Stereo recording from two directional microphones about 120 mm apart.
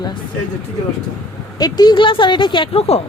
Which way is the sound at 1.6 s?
35° left (ahead or behind).